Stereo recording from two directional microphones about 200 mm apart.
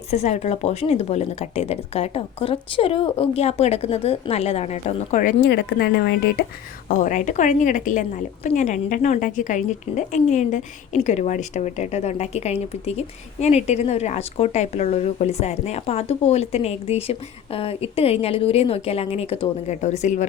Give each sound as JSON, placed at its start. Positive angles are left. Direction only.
{"t": 0.1, "sound": "a woman's voice", "side_deg": 35}
{"t": 5.4, "sound": "speech", "side_deg": 55}
{"t": 6.8, "sound": "a woman's voice", "side_deg": 40}